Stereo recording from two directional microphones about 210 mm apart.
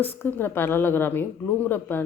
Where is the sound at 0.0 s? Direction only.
10° left (ahead or behind).